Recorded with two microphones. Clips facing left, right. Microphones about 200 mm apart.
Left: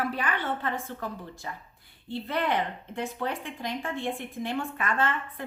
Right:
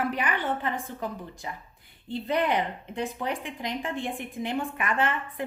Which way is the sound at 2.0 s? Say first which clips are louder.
Right 3 dB; 15° right (ahead or behind).